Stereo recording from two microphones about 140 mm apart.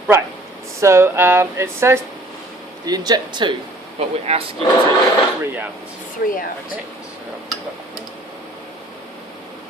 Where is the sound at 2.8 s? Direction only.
30° right (ahead or behind).